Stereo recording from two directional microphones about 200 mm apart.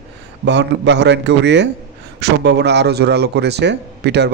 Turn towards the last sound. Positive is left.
turn(degrees=-60)  # may be behind; listen again after turning